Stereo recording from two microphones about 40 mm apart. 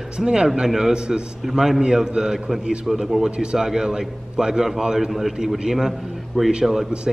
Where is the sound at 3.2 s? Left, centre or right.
Right; by 5.3 s centre.